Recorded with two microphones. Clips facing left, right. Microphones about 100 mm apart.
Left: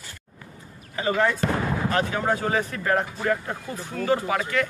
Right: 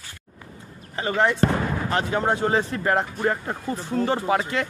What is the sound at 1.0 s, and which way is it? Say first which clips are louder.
Speech: right 2 dB; 30° right (ahead or behind).